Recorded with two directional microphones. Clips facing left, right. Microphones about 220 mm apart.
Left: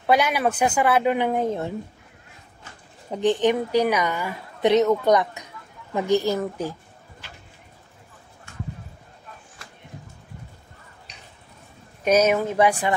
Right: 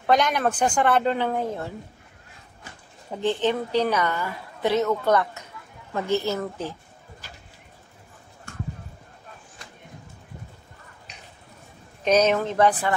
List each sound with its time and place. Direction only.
0.0 s a woman's voice: 10° left (ahead or behind)
3.1 s a woman's voice: 15° left (ahead or behind)
12.0 s a woman's voice: 10° left (ahead or behind)